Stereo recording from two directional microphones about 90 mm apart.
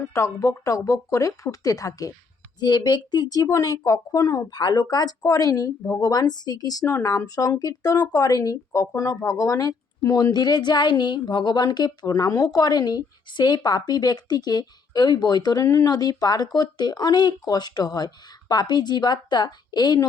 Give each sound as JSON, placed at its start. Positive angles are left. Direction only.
{"t": 0.0, "sound": "speech", "side_deg": 35}
{"t": 2.6, "sound": "a woman's voice", "side_deg": 50}